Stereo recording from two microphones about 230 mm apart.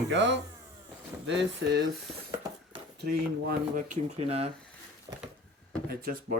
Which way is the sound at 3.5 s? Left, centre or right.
Right.